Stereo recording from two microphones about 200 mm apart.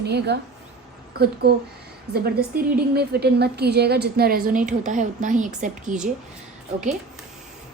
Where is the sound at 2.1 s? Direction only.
55° right (ahead or behind).